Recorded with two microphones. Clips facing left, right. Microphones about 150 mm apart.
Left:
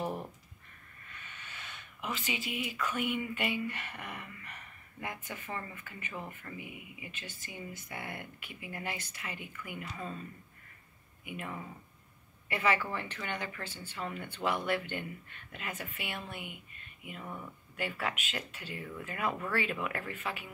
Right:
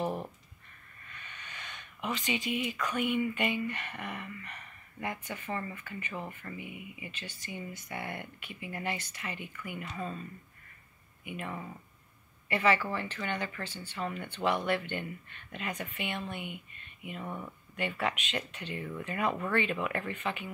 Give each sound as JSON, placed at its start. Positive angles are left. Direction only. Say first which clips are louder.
{"t": 0.0, "sound": "a sound", "louder": "right 3 dB", "side_deg": -15}
{"t": 1.2, "sound": "a sound", "louder": "right 2 dB", "side_deg": 10}
{"t": 2.9, "sound": "speech", "louder": "right 5 dB", "side_deg": 10}
{"t": 11.2, "sound": "a woman's voice", "louder": "right 2 dB", "side_deg": 10}
{"t": 17.2, "sound": "speech", "louder": "right 3 dB", "side_deg": -20}
{"t": 17.7, "sound": "speech", "louder": "right 3 dB", "side_deg": 5}